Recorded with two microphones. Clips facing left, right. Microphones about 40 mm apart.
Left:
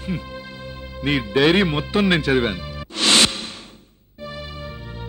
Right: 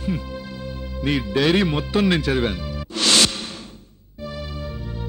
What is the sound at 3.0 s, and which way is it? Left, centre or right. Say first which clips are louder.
Music: left 1 dB; left.